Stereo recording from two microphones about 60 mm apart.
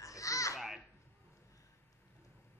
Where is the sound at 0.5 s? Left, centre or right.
Centre.